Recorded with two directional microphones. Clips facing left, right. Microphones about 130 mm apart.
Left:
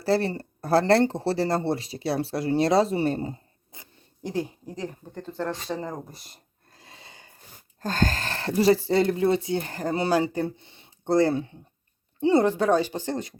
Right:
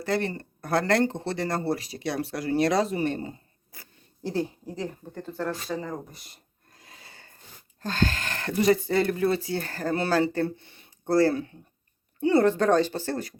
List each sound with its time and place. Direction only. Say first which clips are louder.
0.0 s speech: left 4 dB; 30° left (ahead or behind)
3.7 s zipper: left 1 dB; 20° left (ahead or behind)
4.7 s speech: even; 15° left (ahead or behind)
6.7 s filing: left 2 dB; 25° left (ahead or behind)
7.8 s speech: left 1 dB; 45° left (ahead or behind); by 13.4 s 25° left (ahead or behind)